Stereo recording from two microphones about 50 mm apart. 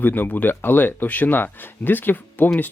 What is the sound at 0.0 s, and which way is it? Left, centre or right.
Speech, left.